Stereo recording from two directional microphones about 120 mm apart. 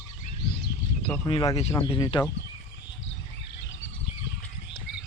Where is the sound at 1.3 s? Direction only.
45° left (ahead or behind).